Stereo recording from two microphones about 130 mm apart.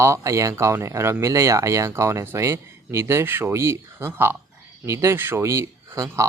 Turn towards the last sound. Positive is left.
turn(degrees=-20)  # may be behind; listen again after turning